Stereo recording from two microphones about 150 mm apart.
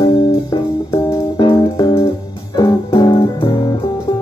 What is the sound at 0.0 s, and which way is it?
Music, 30° left (ahead or behind).